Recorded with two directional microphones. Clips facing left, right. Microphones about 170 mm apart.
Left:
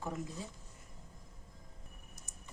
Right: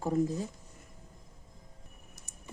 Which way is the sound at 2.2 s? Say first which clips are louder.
Right 1 dB; 70° right (ahead or behind).